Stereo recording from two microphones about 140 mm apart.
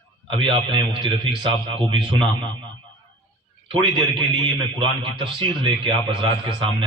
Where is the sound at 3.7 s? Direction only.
40° right (ahead or behind).